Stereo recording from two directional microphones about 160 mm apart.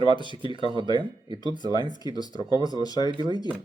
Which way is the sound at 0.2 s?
30° left (ahead or behind).